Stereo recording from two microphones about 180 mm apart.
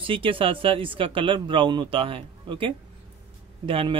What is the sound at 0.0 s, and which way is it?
Speech, 30° right (ahead or behind).